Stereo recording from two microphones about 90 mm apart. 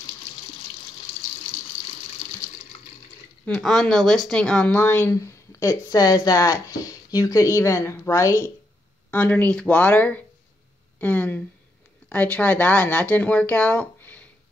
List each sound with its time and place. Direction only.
3.4 s speech: 5° left (ahead or behind)
4.7 s speech: 25° left (ahead or behind)
9.1 s speech: 15° left (ahead or behind)